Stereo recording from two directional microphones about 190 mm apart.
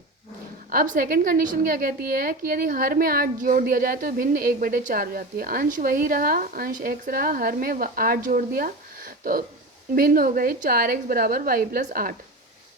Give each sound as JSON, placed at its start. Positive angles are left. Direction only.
{"t": 0.7, "sound": "a woman's voice", "side_deg": -50}